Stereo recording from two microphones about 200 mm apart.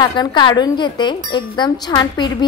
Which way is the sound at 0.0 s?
20° left (ahead or behind).